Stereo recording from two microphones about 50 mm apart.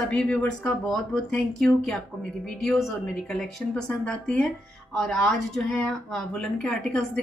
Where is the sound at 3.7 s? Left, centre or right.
Left.